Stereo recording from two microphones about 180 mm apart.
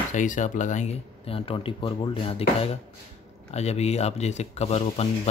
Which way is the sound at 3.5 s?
35° left (ahead or behind).